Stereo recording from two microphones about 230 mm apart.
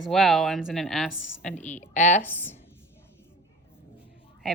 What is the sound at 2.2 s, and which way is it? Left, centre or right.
Speech, centre.